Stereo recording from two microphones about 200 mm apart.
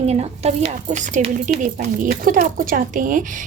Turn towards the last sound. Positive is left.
turn(degrees=-40)  # may be behind; listen again after turning